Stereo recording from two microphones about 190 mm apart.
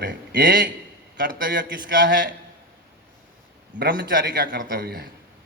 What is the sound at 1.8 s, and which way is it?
Speech, 65° right (ahead or behind).